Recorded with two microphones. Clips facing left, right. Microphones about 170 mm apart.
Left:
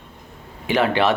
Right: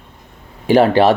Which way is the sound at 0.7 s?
35° right (ahead or behind).